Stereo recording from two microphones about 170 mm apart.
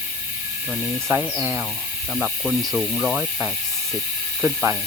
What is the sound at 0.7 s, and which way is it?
Speech, 10° right (ahead or behind).